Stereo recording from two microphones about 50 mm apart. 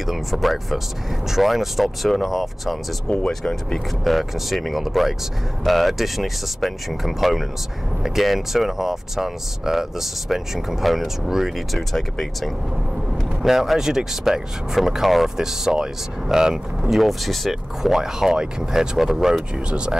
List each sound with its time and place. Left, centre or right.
0.0 s speech: centre
3.1 s speech: centre
4.1 s speech: centre
16.9 s speech: centre
19.5 s speech: right